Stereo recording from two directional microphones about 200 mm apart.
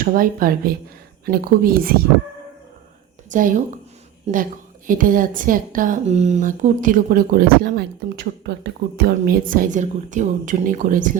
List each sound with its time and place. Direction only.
0.0 s a woman's voice: 45° right (ahead or behind)
3.3 s speech: 40° right (ahead or behind)
4.9 s a woman's voice: 45° right (ahead or behind)